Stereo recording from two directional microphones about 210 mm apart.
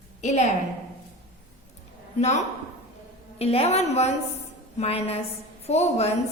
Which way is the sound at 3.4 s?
30° left (ahead or behind).